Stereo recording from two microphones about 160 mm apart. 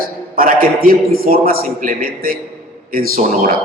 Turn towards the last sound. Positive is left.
turn(degrees=-60)  # may be behind; listen again after turning